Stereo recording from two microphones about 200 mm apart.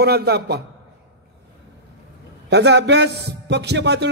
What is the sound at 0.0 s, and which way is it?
Speech, 55° right (ahead or behind).